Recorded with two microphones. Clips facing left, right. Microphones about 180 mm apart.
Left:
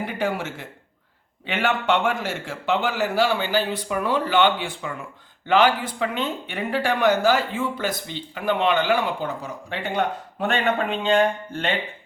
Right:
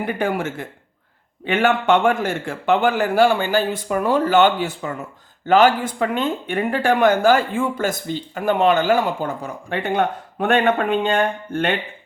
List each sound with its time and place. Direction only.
0.0 s speech: 55° right (ahead or behind)